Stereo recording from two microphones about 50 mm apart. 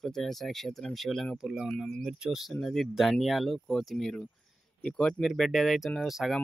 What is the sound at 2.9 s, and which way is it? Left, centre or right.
Speech, centre.